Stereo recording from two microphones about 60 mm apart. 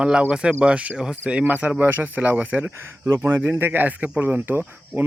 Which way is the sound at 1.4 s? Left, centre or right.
Right.